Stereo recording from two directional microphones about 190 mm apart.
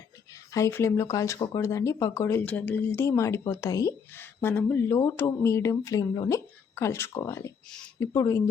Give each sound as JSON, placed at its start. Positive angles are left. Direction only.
{"t": 0.5, "sound": "speech", "side_deg": 15}